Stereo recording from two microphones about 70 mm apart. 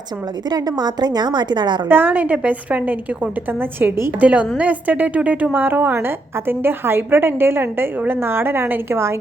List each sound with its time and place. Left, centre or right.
0.5 s a woman's voice: right
1.9 s a woman's voice: right
4.2 s a woman's voice: right